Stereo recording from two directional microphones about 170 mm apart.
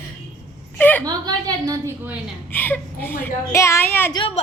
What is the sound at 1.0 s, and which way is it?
Speech, 20° right (ahead or behind).